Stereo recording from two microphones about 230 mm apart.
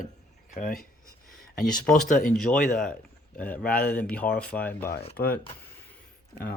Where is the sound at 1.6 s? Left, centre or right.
Centre.